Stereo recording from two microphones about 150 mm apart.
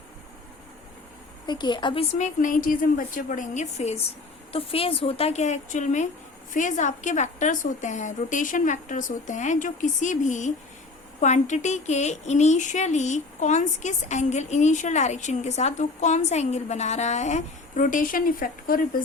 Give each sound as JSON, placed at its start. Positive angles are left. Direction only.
{"t": 1.5, "sound": "a woman's voice", "side_deg": 30}
{"t": 2.1, "sound": "a woman's voice", "side_deg": 55}